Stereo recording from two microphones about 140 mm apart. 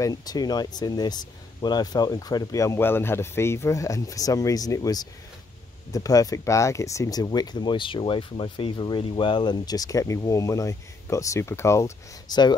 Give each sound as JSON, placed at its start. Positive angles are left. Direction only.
{"t": 0.0, "sound": "speech", "side_deg": 25}